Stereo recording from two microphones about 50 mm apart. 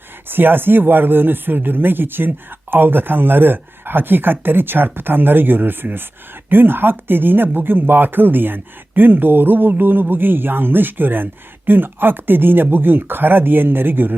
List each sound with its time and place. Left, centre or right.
0.3 s speech: right